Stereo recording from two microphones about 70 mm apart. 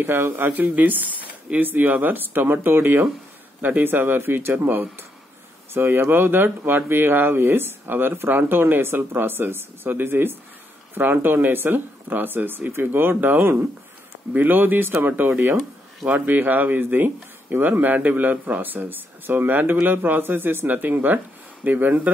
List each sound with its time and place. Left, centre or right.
0.0 s speech: right
0.5 s speech: right